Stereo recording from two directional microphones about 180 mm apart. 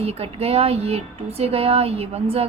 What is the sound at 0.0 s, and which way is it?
Speech, 35° right (ahead or behind).